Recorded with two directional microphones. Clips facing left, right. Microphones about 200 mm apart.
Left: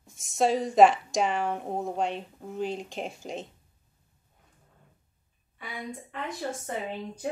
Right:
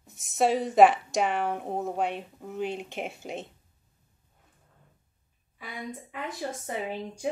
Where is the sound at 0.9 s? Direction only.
60° right (ahead or behind).